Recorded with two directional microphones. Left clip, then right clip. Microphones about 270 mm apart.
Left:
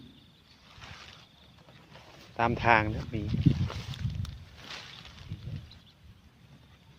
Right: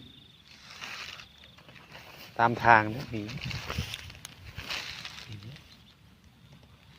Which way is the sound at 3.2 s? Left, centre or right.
Right.